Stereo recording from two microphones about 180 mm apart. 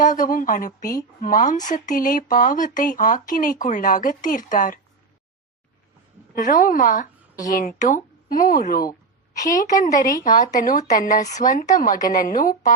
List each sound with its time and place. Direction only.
0.0 s speech: 45° left (ahead or behind)
6.3 s a woman's voice: 50° left (ahead or behind)